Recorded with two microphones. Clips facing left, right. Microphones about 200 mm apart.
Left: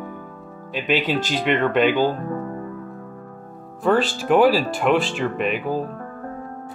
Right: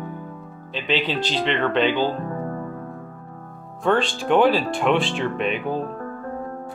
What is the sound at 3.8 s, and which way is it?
Speech, 5° left (ahead or behind).